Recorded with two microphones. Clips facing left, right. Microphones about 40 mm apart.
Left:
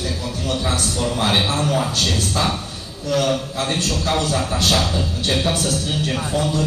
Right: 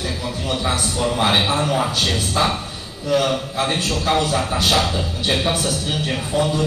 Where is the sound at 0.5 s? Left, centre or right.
Centre.